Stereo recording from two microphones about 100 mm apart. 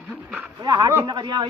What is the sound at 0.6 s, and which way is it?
Speech, 35° right (ahead or behind).